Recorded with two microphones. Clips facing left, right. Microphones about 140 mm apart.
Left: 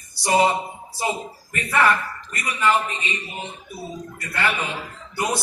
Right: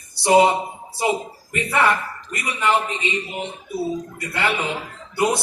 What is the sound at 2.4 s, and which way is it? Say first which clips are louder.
Speech: even; 20° right (ahead or behind).